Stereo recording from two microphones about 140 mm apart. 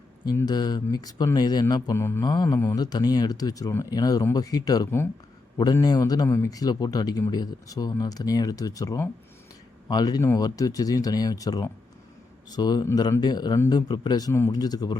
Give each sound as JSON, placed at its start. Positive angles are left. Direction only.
{"t": 0.3, "sound": "speech", "side_deg": 30}